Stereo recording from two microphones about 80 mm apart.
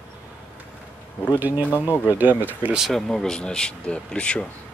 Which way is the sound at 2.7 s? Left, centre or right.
Centre.